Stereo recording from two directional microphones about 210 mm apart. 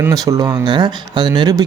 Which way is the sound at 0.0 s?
15° right (ahead or behind).